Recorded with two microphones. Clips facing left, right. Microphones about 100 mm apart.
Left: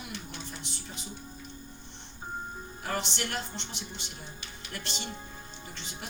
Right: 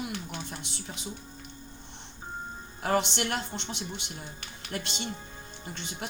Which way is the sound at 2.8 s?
60° right (ahead or behind).